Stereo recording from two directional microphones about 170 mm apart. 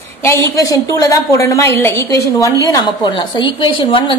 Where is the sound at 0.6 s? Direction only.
20° left (ahead or behind).